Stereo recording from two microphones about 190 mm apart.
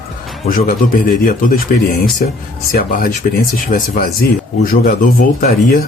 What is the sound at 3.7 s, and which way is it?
Speech, 50° left (ahead or behind).